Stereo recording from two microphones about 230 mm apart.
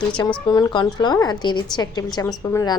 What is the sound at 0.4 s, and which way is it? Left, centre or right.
A woman's voice, centre.